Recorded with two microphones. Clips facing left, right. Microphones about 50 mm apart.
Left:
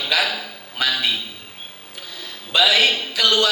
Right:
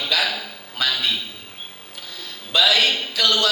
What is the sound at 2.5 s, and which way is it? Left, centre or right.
Speech, centre.